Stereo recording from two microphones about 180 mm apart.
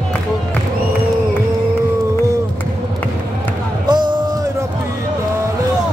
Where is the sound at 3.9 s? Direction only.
25° right (ahead or behind).